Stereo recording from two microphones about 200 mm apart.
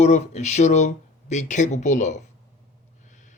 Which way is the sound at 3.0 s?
40° left (ahead or behind).